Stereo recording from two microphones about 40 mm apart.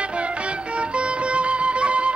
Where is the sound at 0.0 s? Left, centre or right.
Right.